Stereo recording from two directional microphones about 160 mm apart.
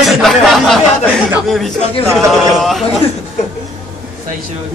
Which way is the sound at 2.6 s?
Centre (ahead or behind).